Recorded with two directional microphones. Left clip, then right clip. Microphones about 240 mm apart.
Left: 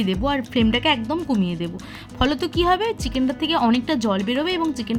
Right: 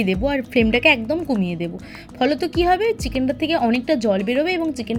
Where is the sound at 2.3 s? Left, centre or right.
Left.